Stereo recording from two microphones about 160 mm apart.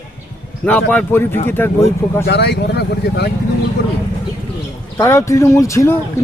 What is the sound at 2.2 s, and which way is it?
Speech, 90° left.